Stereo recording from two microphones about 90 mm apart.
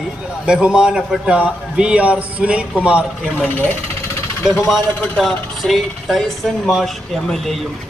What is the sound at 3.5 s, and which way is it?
Speech, 20° left (ahead or behind).